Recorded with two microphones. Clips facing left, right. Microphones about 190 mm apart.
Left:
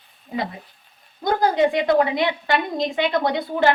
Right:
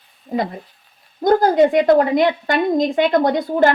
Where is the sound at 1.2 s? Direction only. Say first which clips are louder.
Right 5 dB; 45° right (ahead or behind).